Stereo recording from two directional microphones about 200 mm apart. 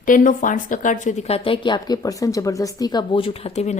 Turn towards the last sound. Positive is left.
turn(degrees=35)  # may be behind; listen again after turning